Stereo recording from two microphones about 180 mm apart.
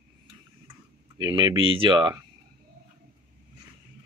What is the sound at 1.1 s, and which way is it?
Speech, 25° right (ahead or behind).